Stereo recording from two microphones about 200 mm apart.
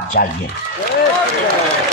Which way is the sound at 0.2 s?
50° left (ahead or behind).